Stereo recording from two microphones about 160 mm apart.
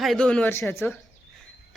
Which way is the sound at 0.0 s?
Centre (ahead or behind).